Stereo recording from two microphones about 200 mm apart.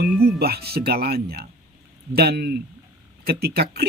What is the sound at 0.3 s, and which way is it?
Speech, 50° right (ahead or behind).